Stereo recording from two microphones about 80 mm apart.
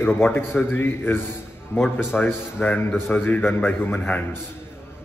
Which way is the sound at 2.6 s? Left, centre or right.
Centre.